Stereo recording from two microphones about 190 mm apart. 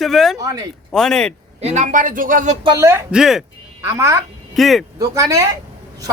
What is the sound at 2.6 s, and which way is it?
Speech, 15° right (ahead or behind).